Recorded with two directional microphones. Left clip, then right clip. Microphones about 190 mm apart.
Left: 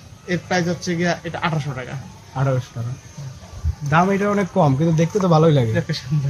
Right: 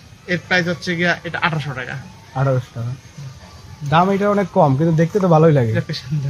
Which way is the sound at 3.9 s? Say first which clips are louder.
Right 2 dB; 25° right (ahead or behind).